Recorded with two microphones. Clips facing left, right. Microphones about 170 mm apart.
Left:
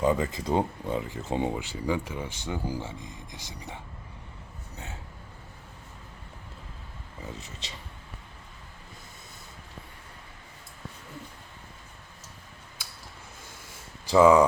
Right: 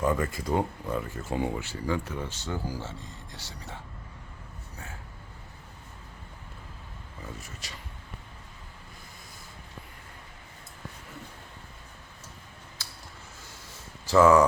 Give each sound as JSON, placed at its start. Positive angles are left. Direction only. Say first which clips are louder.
{"t": 0.0, "sound": "speech", "louder": "left 2 dB", "side_deg": 20}
{"t": 7.3, "sound": "speech", "louder": "left 1 dB", "side_deg": 20}
{"t": 14.1, "sound": "speech", "louder": "left 1 dB", "side_deg": 15}